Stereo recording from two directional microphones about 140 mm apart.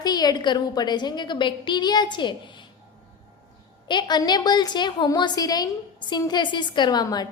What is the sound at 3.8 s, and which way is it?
A woman's voice, 30° left (ahead or behind).